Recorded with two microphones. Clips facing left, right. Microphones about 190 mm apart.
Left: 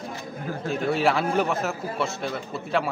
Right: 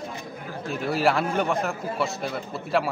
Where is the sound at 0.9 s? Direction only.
Centre (ahead or behind).